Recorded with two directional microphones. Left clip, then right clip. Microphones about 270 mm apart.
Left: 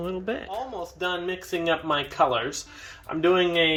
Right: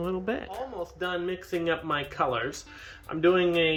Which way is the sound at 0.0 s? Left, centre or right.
Centre.